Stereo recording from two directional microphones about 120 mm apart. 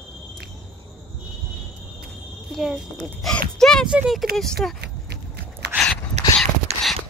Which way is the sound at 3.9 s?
5° right (ahead or behind).